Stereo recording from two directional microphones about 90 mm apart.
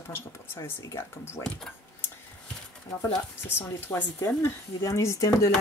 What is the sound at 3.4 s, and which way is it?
Speech, 30° left (ahead or behind).